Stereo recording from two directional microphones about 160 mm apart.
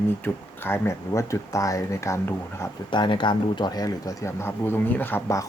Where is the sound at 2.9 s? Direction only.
30° left (ahead or behind).